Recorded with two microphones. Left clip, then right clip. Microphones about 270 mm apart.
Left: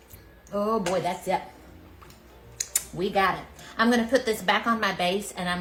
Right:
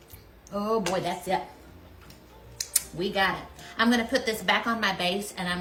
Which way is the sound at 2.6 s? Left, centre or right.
Centre.